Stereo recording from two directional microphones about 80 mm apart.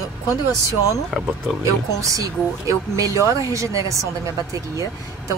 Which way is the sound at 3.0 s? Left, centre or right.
Right.